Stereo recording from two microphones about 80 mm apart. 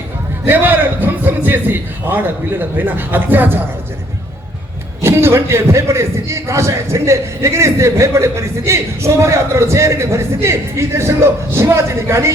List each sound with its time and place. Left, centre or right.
0.4 s a man's voice: right
5.0 s a man's voice: right